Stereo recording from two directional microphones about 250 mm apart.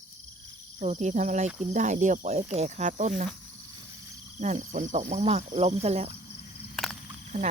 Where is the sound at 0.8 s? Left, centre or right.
Right.